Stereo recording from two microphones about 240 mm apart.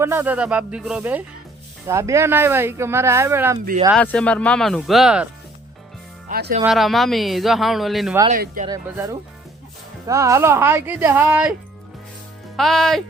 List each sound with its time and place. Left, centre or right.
0.0 s speech: centre
3.9 s speech: centre
6.2 s speech: right
6.7 s speech: centre
8.3 s speech: right
8.6 s speech: centre
12.5 s speech: centre